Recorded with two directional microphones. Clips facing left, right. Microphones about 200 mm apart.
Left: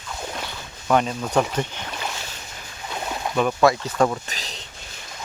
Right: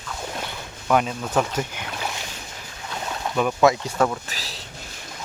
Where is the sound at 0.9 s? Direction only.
5° right (ahead or behind).